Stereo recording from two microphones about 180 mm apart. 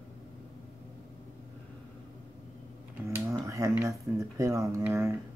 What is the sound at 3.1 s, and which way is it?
Speech, 15° right (ahead or behind).